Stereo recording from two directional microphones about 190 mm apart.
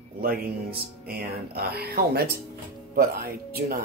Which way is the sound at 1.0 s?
55° right (ahead or behind).